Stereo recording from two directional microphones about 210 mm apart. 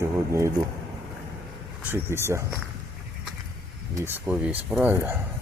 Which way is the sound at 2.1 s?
10° right (ahead or behind).